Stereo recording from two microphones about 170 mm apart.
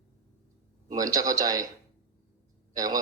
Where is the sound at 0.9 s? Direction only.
20° right (ahead or behind).